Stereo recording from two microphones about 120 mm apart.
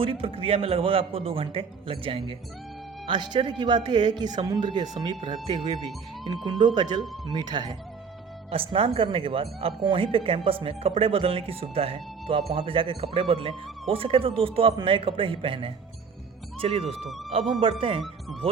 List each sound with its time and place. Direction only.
0.0 s speech: 50° right (ahead or behind)
3.1 s speech: 40° right (ahead or behind)
6.2 s speech: 40° right (ahead or behind)
8.7 s speech: 50° right (ahead or behind)